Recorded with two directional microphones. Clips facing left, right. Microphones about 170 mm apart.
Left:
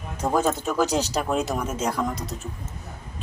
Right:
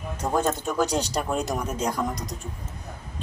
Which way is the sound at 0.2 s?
10° left (ahead or behind).